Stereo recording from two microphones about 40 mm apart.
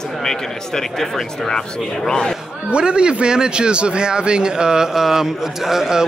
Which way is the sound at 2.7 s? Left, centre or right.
Right.